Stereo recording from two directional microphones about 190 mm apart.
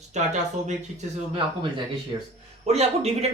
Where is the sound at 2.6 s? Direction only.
35° right (ahead or behind).